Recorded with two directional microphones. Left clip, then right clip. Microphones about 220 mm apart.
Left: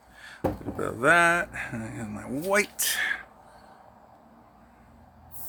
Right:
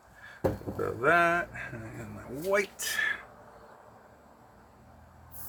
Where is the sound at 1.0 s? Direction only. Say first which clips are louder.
Left 4 dB; 60° left (ahead or behind).